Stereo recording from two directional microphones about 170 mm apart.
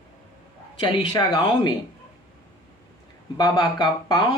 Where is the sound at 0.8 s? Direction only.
25° left (ahead or behind).